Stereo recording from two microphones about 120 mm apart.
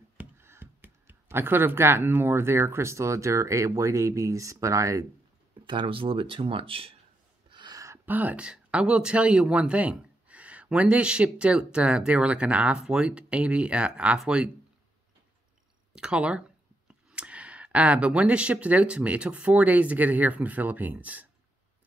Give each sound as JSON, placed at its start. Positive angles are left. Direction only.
{"t": 0.2, "sound": "speech", "side_deg": -20}
{"t": 5.7, "sound": "speech", "side_deg": -45}
{"t": 7.4, "sound": "a sound", "side_deg": -40}
{"t": 7.8, "sound": "speech", "side_deg": -20}
{"t": 15.9, "sound": "speech", "side_deg": -5}